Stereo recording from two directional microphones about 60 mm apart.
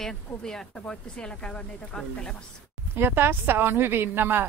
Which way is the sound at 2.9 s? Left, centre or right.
Right.